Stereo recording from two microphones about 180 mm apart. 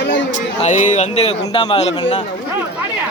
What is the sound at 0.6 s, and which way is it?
Speech, 40° left (ahead or behind).